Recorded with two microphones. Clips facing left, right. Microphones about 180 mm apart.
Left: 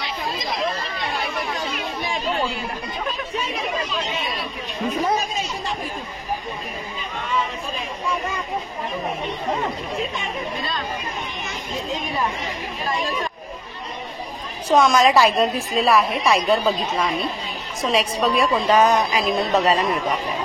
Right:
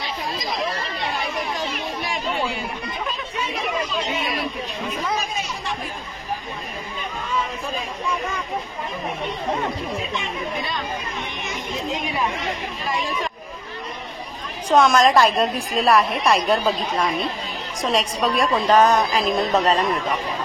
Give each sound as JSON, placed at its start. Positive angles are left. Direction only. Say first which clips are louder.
{"t": 11.9, "sound": "speech", "louder": "even", "side_deg": -10}
{"t": 14.7, "sound": "a woman's voice", "louder": "even", "side_deg": 5}